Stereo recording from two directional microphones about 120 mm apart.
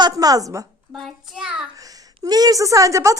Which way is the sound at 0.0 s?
30° right (ahead or behind).